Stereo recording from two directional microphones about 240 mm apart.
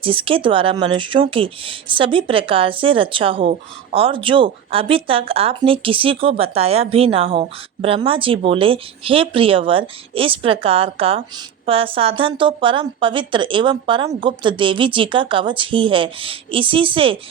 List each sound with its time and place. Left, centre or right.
0.0 s speech: right